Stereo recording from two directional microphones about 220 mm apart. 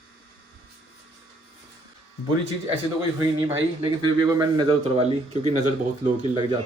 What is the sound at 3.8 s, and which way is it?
Speech, 20° right (ahead or behind).